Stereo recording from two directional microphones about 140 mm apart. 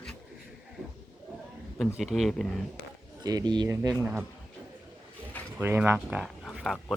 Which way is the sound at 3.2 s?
30° right (ahead or behind).